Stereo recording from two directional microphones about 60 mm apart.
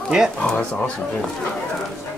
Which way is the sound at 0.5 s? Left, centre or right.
Centre.